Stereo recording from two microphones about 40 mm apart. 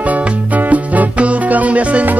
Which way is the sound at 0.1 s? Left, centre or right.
Right.